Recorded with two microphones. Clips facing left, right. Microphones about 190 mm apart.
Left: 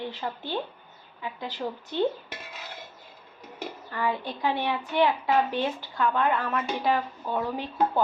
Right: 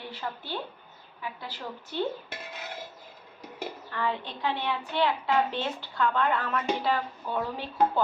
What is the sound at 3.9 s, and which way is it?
A woman's voice, 10° left (ahead or behind).